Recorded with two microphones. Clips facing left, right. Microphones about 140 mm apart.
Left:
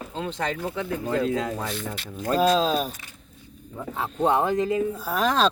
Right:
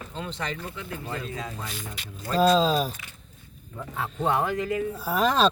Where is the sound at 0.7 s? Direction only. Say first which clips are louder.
Left 9 dB; 90° left.